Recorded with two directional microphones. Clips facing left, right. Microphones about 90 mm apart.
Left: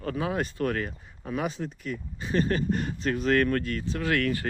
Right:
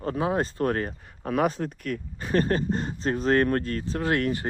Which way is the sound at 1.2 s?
55° right (ahead or behind).